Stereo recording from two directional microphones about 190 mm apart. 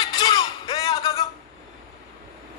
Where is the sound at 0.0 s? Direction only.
25° left (ahead or behind).